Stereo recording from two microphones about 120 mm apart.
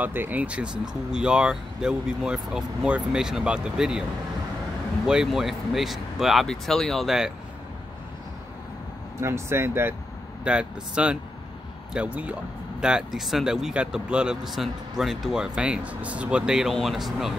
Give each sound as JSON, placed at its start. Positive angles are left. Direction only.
{"t": 0.0, "sound": "speech", "side_deg": -15}
{"t": 5.0, "sound": "speech", "side_deg": -5}
{"t": 9.2, "sound": "speech", "side_deg": -20}
{"t": 10.4, "sound": "speech", "side_deg": -10}